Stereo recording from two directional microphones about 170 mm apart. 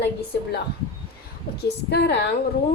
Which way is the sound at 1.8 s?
80° left.